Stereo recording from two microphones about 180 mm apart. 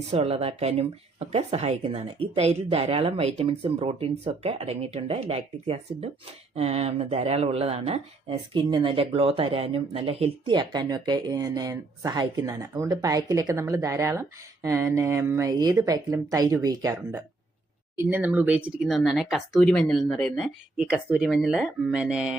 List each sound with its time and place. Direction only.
0.1 s speech: 35° right (ahead or behind); by 22.4 s 5° right (ahead or behind)